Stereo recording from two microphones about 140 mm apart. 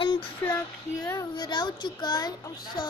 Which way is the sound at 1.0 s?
25° left (ahead or behind).